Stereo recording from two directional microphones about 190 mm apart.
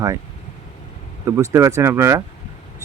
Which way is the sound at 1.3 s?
15° right (ahead or behind).